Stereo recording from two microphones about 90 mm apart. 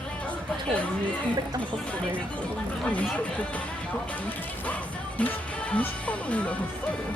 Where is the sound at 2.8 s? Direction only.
15° left (ahead or behind).